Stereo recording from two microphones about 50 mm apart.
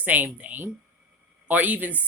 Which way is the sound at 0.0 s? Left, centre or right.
Right.